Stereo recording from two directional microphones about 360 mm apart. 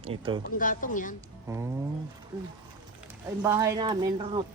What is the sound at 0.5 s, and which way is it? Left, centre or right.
Speech, left.